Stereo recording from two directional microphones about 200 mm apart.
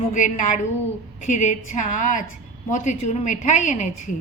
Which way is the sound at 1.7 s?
40° left (ahead or behind).